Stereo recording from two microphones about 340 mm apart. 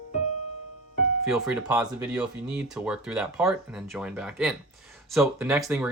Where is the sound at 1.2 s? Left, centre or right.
Centre.